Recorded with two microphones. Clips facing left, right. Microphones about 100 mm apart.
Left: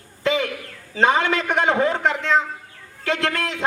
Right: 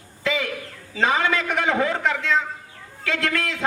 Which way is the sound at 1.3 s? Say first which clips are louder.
Left 2 dB; 30° left (ahead or behind).